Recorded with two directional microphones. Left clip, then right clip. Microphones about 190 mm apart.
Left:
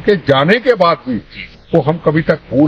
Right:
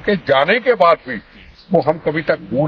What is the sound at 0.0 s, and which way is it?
Speech, 30° right (ahead or behind).